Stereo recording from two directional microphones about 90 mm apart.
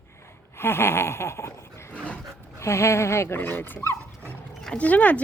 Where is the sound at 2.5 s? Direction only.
30° left (ahead or behind).